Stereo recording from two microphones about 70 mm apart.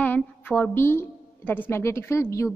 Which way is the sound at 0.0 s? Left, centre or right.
Left.